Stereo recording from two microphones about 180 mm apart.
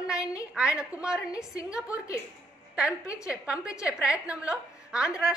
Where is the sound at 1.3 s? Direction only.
20° left (ahead or behind).